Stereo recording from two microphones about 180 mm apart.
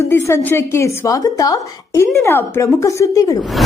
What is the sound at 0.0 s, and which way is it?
Speech, 15° left (ahead or behind).